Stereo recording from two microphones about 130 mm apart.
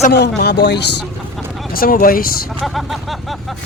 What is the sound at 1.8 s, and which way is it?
Speech, 90° left.